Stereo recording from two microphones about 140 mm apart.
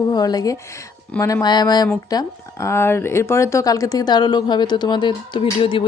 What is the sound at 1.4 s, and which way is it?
A woman's voice, 30° left (ahead or behind).